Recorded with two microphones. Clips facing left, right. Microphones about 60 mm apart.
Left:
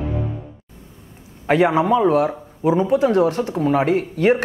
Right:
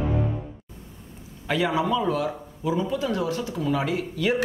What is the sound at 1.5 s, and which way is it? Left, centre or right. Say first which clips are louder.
A man's voice: left 8 dB; left.